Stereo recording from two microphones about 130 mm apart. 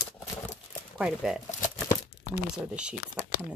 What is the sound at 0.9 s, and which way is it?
Speech, 5° right (ahead or behind).